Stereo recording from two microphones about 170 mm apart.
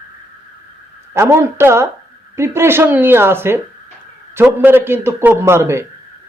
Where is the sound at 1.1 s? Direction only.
15° right (ahead or behind).